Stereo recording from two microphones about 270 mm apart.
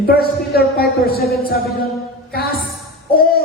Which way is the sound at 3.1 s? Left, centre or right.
Left.